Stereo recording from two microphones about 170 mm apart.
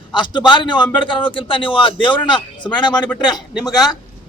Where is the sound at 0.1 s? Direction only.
25° left (ahead or behind).